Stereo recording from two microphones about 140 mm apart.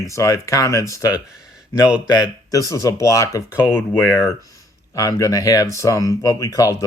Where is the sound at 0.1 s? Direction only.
20° left (ahead or behind).